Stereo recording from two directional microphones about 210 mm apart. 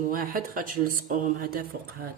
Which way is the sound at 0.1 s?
40° right (ahead or behind).